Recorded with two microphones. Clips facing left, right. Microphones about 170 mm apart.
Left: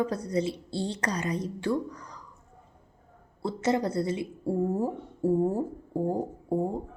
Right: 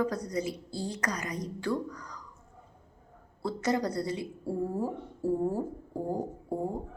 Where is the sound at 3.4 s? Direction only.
25° left (ahead or behind).